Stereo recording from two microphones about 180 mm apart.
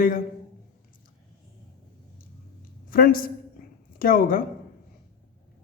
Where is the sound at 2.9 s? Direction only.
55° left (ahead or behind).